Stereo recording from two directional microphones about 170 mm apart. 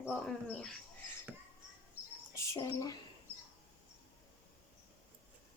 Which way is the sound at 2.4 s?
20° left (ahead or behind).